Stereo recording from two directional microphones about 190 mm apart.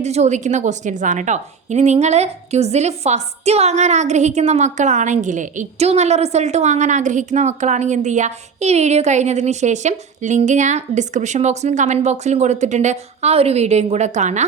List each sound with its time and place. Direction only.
0.0 s a woman's voice: 35° right (ahead or behind)